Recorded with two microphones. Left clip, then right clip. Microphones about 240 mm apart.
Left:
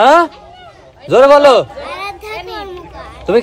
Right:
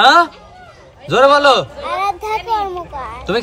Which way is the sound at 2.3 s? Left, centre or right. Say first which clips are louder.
Right 7 dB; centre.